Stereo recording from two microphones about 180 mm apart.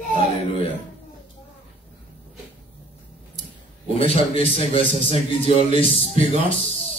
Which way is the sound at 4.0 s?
30° left (ahead or behind).